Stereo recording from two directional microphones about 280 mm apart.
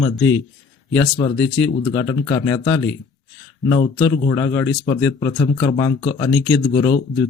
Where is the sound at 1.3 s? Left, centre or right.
Left.